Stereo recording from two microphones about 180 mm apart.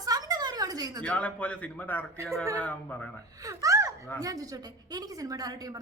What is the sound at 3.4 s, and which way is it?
A woman's voice, 20° right (ahead or behind).